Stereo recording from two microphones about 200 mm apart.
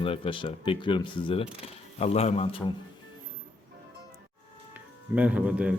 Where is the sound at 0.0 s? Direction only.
25° left (ahead or behind).